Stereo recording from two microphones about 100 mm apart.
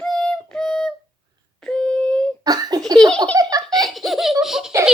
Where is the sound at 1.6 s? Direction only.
10° left (ahead or behind).